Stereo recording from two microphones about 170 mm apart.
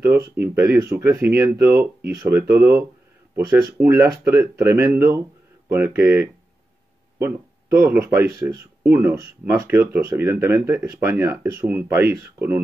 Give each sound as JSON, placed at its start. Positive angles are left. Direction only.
{"t": 0.0, "sound": "speech", "side_deg": -15}